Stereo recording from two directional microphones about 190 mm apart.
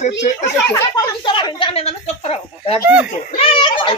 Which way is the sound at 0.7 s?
25° left (ahead or behind).